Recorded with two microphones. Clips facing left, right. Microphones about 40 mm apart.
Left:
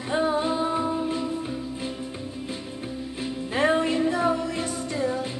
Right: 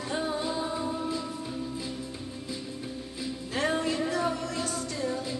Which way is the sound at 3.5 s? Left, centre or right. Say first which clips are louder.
Left 6 dB; left.